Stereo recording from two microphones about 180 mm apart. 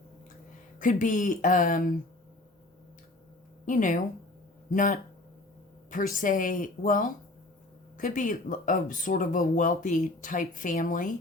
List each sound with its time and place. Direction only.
0.8 s speech: 45° left (ahead or behind)
3.7 s speech: 45° left (ahead or behind)